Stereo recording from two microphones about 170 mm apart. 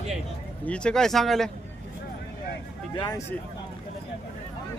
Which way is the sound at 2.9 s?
25° left (ahead or behind).